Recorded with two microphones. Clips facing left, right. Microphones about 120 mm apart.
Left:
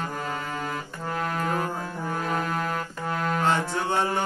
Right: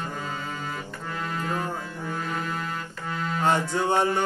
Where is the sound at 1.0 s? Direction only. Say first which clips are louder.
Left 3 dB; 55° left (ahead or behind).